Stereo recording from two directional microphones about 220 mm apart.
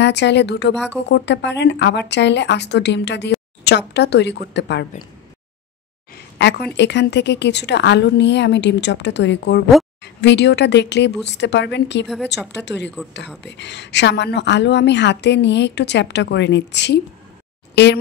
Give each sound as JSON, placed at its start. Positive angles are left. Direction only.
{"t": 0.0, "sound": "speech", "side_deg": 50}
{"t": 6.3, "sound": "speech", "side_deg": 50}